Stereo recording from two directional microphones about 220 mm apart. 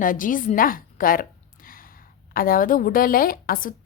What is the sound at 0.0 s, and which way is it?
A woman's voice, 40° left (ahead or behind).